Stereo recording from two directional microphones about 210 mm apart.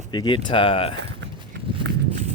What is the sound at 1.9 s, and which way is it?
Walk, 55° right (ahead or behind).